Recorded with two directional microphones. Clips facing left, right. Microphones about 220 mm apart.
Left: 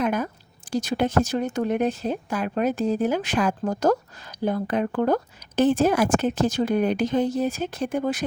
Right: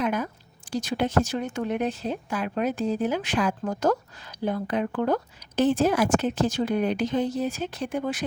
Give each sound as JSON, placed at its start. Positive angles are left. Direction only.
{"t": 0.0, "sound": "a woman's voice", "side_deg": 45}